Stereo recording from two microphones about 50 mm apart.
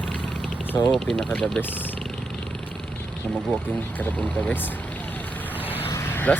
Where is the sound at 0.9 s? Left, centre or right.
Centre.